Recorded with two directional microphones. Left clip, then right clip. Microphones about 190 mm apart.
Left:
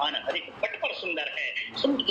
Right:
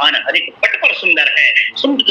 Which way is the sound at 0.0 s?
50° right (ahead or behind).